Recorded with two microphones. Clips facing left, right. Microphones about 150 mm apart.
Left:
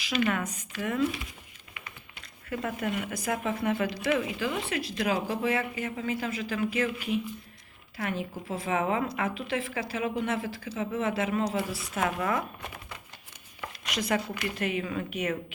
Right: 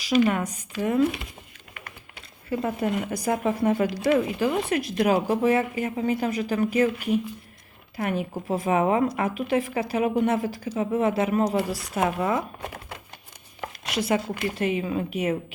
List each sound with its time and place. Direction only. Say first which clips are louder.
0.0 s speech: right 7 dB; 35° right (ahead or behind)
2.5 s speech: right 6 dB; 30° right (ahead or behind)
13.6 s speech: right 5 dB; 30° right (ahead or behind)